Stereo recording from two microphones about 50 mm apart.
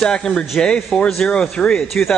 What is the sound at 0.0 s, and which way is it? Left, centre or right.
A man's voice, centre.